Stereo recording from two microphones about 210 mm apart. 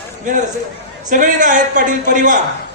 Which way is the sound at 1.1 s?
40° right (ahead or behind).